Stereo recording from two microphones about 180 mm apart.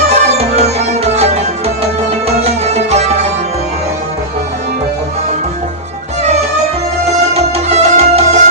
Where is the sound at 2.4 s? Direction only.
35° right (ahead or behind).